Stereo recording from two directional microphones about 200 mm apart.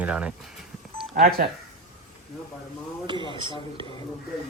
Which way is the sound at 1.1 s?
45° right (ahead or behind).